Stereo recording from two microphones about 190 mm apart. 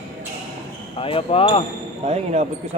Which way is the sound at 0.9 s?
30° left (ahead or behind).